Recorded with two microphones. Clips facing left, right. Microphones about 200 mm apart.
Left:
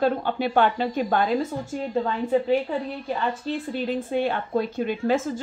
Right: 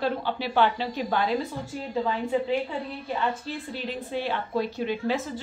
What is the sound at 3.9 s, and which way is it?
A woman's voice, 50° left (ahead or behind).